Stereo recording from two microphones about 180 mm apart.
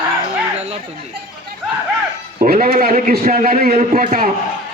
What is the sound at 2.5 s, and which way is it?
A man's voice, 55° right (ahead or behind).